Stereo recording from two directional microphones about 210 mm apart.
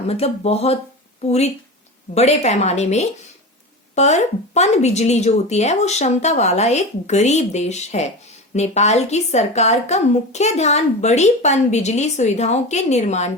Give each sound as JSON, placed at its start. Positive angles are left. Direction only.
{"t": 0.1, "sound": "a woman's voice", "side_deg": 30}